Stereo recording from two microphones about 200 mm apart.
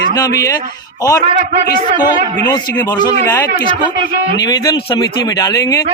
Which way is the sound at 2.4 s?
20° left (ahead or behind).